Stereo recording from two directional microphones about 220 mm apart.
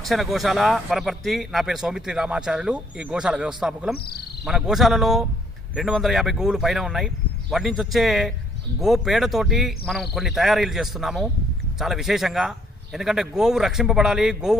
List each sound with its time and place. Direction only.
0.0 s speech: centre (ahead or behind)
3.9 s speech: 45° left (ahead or behind)
4.4 s speech: centre (ahead or behind)